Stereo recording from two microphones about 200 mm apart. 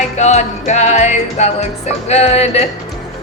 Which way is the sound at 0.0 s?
35° left (ahead or behind).